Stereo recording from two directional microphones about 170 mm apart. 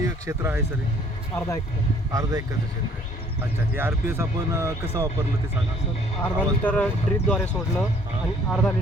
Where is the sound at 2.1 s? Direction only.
20° right (ahead or behind).